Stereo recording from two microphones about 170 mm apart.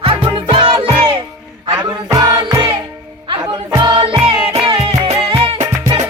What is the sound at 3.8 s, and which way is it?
Music, 30° right (ahead or behind).